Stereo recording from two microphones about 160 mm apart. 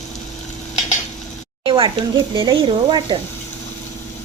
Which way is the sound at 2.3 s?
30° right (ahead or behind).